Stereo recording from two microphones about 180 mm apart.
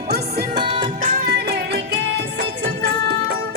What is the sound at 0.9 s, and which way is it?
Music, 50° right (ahead or behind).